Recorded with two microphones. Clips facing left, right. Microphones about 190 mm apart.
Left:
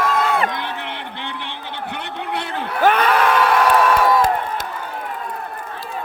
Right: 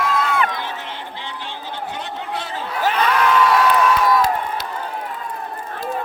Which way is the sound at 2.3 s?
60° left (ahead or behind).